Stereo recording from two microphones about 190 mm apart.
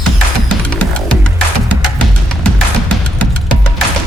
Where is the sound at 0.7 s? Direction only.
5° left (ahead or behind).